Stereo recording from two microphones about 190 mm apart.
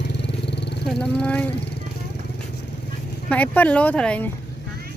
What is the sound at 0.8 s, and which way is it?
Wild animals, 5° left (ahead or behind).